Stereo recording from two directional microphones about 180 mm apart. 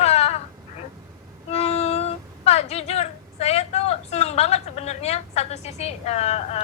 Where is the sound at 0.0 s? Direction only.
35° left (ahead or behind).